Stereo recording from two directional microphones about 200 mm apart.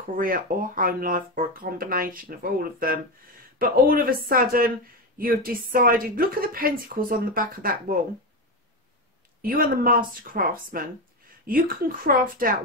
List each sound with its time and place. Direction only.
0.1 s speech: 45° right (ahead or behind)
9.4 s speech: 45° right (ahead or behind)